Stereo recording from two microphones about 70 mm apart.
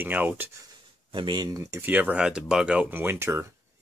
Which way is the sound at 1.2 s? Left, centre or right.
Right.